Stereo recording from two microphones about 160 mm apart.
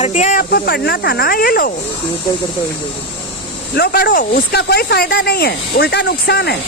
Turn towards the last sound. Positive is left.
turn(degrees=90)